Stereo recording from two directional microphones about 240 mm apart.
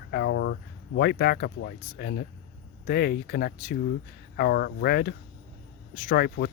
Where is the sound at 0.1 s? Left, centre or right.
Left.